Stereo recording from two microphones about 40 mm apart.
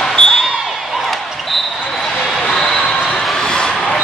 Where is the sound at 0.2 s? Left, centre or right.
Left.